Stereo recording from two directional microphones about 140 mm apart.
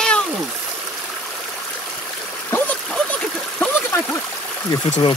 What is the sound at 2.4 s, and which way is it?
Splash, 10° left (ahead or behind).